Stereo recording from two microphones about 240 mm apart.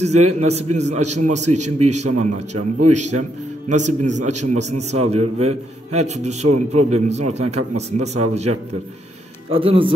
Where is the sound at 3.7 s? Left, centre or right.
Right.